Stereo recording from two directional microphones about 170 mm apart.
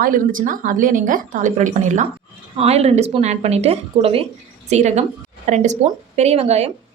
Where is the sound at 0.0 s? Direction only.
55° right (ahead or behind).